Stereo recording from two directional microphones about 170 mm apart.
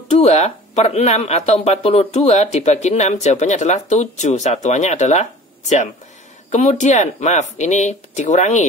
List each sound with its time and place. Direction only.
0.1 s speech: 40° left (ahead or behind)